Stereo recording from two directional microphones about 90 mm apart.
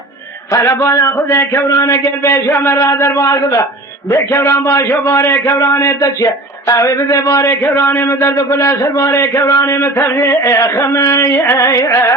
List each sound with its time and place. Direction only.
0.5 s a man's voice: 30° left (ahead or behind)
7.6 s a man's voice: 25° left (ahead or behind)